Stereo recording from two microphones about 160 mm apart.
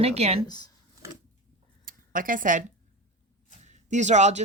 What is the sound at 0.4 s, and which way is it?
Speech, 25° left (ahead or behind).